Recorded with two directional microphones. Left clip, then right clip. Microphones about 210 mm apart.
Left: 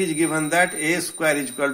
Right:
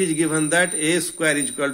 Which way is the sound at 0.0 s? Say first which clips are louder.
Right 1 dB; 55° right (ahead or behind).